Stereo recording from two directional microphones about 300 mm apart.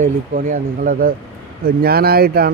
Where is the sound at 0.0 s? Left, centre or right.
Right.